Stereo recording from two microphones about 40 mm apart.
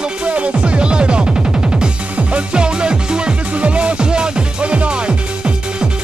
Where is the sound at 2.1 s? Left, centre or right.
Right.